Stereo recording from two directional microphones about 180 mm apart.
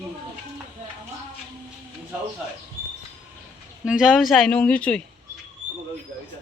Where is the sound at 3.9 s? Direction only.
5° right (ahead or behind).